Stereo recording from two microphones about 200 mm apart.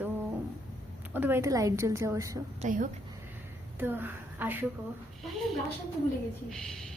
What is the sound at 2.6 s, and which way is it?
Speech, 40° right (ahead or behind).